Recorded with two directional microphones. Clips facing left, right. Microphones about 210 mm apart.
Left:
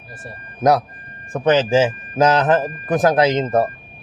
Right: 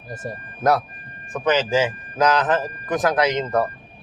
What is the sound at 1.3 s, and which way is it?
Speech, 30° left (ahead or behind).